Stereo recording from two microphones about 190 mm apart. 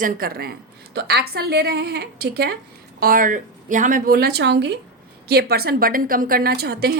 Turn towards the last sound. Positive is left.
turn(degrees=-55)  # may be behind; listen again after turning